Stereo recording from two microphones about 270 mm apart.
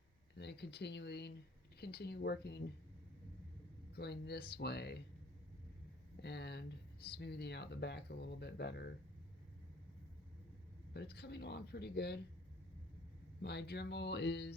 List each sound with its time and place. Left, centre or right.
0.3 s speech: left
3.9 s speech: left
6.2 s speech: left
10.9 s speech: left
13.4 s speech: left